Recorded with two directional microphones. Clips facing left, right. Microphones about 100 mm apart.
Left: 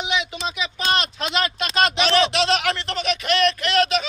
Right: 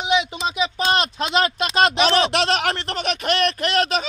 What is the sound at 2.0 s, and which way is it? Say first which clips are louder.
Speech: right 1 dB; 40° right (ahead or behind).